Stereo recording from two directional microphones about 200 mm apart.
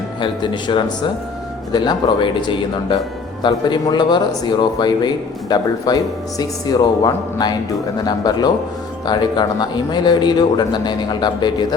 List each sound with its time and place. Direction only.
0.2 s speech: 25° left (ahead or behind)